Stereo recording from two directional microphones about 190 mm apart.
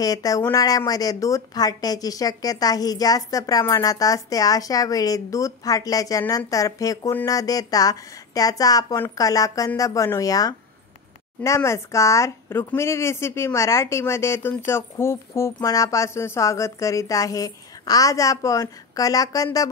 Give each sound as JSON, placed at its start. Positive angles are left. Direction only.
{"t": 0.0, "sound": "a woman's voice", "side_deg": 20}